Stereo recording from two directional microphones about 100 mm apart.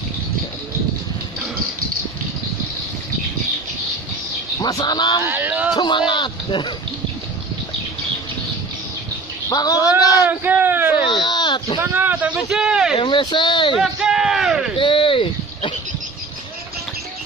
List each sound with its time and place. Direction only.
4.6 s speech: 40° left (ahead or behind)
5.2 s speech: 20° right (ahead or behind)
5.8 s speech: 50° left (ahead or behind)
9.5 s speech: 35° left (ahead or behind)
10.2 s speech: 20° right (ahead or behind)
11.1 s speech: 50° left (ahead or behind)
11.8 s a man's voice: 20° right (ahead or behind)
12.9 s speech: 55° left (ahead or behind)
13.7 s speech: 5° right (ahead or behind)
14.8 s a sound: 60° left (ahead or behind)